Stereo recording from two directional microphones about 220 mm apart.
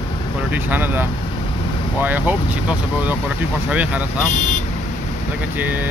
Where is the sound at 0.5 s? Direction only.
10° right (ahead or behind).